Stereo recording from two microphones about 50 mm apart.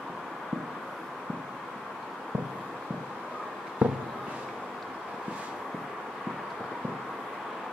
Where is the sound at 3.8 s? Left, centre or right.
Right.